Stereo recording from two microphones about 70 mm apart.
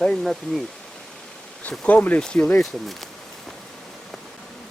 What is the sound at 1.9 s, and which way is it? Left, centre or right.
Speech, left.